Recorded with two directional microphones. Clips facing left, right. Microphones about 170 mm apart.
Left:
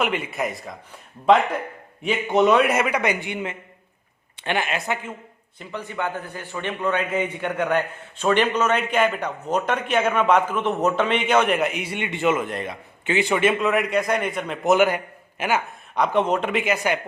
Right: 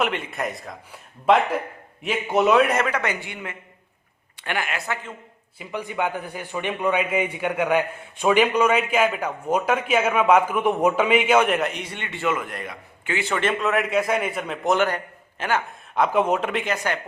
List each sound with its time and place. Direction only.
0.0 s speech: 5° left (ahead or behind)
2.0 s a man's voice: 5° right (ahead or behind); by 4.9 s 25° left (ahead or behind)
5.5 s a man's voice: 10° right (ahead or behind); by 15.6 s 10° left (ahead or behind)
16.0 s speech: 5° right (ahead or behind); by 17.0 s 10° left (ahead or behind)